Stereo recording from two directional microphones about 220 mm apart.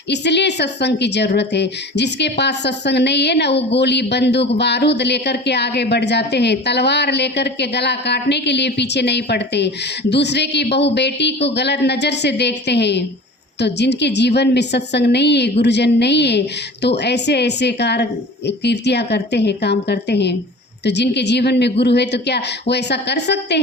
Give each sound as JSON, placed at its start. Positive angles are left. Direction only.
{"t": 0.1, "sound": "a woman's voice", "side_deg": 50}